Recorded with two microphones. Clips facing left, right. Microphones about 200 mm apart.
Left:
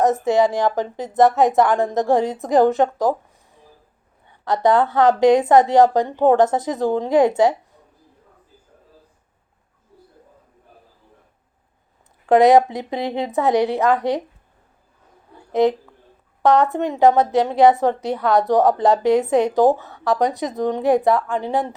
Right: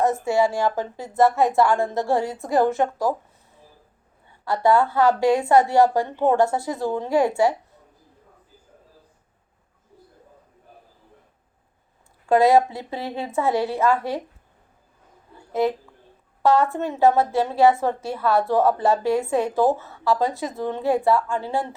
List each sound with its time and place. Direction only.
0.0 s a woman's voice: 20° left (ahead or behind)
4.3 s a woman's voice: 20° left (ahead or behind)
12.3 s a woman's voice: 20° left (ahead or behind)
16.4 s a woman's voice: 20° left (ahead or behind)